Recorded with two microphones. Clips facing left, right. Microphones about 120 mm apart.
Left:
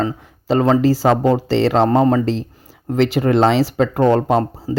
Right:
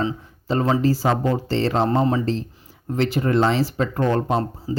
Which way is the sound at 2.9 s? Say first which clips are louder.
Left 5 dB; 85° left.